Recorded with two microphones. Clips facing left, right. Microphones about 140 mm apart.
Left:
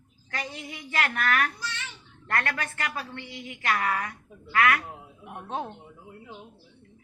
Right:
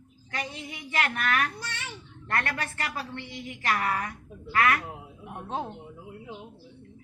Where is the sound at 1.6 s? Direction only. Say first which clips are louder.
Left 1 dB; 50° right (ahead or behind).